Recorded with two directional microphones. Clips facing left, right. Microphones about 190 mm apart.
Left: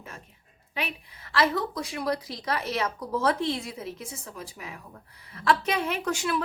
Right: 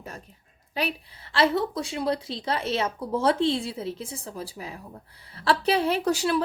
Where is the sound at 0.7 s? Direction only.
35° right (ahead or behind).